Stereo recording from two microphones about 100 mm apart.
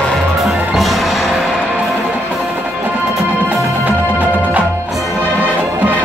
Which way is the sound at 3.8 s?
15° right (ahead or behind).